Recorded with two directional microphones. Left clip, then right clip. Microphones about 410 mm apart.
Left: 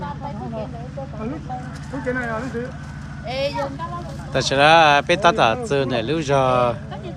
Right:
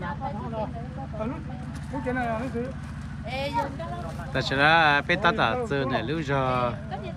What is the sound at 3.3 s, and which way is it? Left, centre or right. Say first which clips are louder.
Vehicle: left 7 dB; centre.